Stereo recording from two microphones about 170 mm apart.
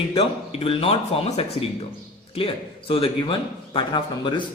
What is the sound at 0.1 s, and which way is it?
A man's voice, 35° left (ahead or behind).